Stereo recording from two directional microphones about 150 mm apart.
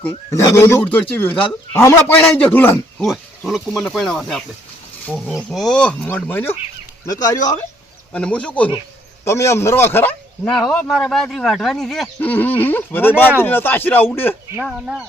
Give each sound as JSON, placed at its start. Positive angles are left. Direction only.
{"t": 0.3, "sound": "speech", "side_deg": 20}
{"t": 3.1, "sound": "speech", "side_deg": 0}
{"t": 7.1, "sound": "speech", "side_deg": 25}
{"t": 8.1, "sound": "speech", "side_deg": 10}
{"t": 10.5, "sound": "speech", "side_deg": 0}
{"t": 14.6, "sound": "speech", "side_deg": 0}